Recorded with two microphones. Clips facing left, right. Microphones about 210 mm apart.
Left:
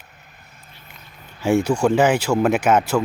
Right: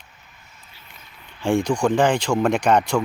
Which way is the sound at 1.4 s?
5° left (ahead or behind).